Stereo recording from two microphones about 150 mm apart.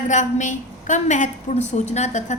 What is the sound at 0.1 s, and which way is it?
A woman's voice, 55° left (ahead or behind).